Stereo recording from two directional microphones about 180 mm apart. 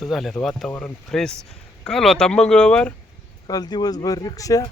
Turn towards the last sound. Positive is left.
turn(degrees=20)  # may be behind; listen again after turning